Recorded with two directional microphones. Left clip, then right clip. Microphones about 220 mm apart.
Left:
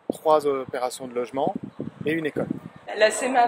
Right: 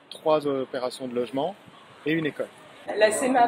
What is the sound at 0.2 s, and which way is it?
Speech, 55° left (ahead or behind).